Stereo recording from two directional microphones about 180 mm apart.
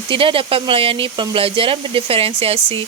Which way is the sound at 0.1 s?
30° right (ahead or behind).